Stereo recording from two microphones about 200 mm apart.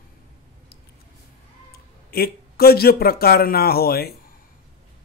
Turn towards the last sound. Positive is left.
turn(degrees=50)  # may be behind; listen again after turning